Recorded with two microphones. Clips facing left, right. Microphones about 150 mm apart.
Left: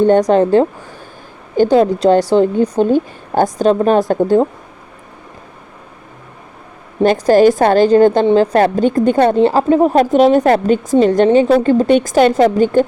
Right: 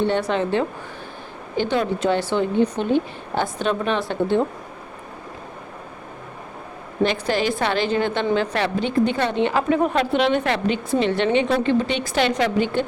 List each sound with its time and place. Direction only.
0.0 s a woman's voice: 40° left (ahead or behind)
7.0 s a woman's voice: 45° left (ahead or behind)